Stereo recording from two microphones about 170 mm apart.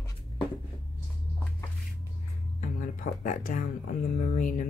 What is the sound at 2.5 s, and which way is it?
Speech, 50° left (ahead or behind).